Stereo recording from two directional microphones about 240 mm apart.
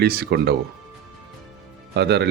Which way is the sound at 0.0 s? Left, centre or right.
Right.